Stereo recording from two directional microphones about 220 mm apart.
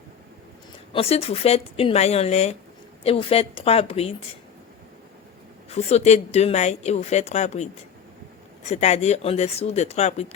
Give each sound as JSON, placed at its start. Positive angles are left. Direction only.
{"t": 0.9, "sound": "speech", "side_deg": 25}
{"t": 5.7, "sound": "speech", "side_deg": 30}